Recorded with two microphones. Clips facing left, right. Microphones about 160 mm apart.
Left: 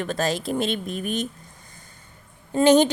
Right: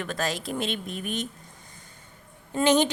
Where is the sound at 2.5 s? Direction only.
35° left (ahead or behind).